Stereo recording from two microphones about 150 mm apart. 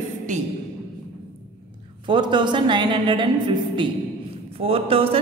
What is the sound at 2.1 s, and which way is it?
A woman's voice, 30° right (ahead or behind).